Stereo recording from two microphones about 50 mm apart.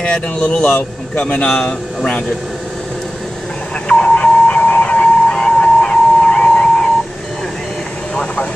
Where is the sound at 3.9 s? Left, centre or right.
Left.